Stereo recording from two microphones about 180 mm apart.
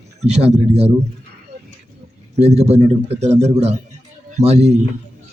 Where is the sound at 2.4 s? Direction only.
35° right (ahead or behind).